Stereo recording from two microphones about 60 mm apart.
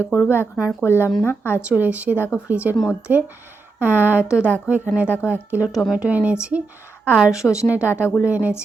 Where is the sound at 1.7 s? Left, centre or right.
Right.